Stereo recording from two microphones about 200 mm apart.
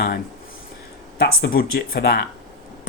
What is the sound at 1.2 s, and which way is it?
Speech, 50° left (ahead or behind).